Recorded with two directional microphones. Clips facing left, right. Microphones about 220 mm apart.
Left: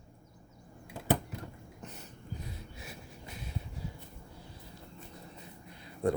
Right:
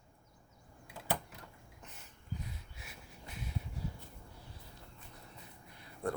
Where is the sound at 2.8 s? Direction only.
40° left (ahead or behind).